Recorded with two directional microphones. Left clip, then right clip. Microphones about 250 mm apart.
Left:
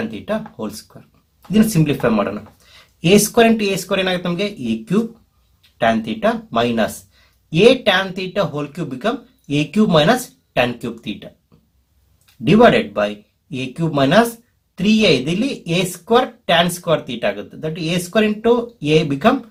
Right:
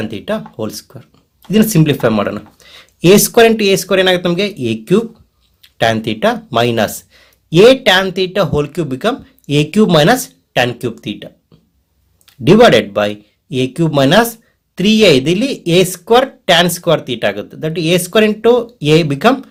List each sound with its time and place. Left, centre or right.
0.1 s speech: right
3.2 s speech: right